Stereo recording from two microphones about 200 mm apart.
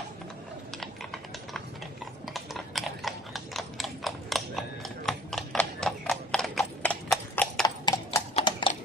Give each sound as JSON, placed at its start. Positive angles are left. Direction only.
{"t": 2.3, "sound": "horse", "side_deg": 0}
{"t": 7.6, "sound": "clip-clop", "side_deg": 15}